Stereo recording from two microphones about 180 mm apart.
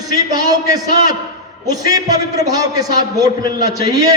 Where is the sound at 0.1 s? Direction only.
20° right (ahead or behind).